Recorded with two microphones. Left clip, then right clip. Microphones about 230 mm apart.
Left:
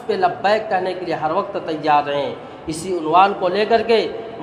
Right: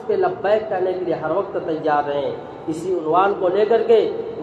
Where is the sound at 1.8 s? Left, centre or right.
Left.